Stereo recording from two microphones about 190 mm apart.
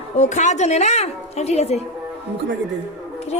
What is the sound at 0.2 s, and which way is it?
A woman's voice, 40° left (ahead or behind).